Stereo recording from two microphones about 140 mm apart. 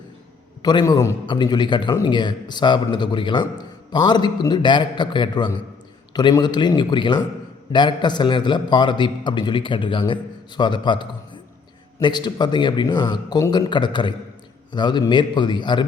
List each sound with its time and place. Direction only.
0.6 s a man's voice: 30° left (ahead or behind)